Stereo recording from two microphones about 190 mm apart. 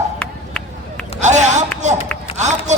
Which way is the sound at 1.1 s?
40° right (ahead or behind).